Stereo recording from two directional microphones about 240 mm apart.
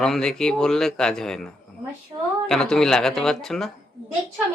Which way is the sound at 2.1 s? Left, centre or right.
Centre.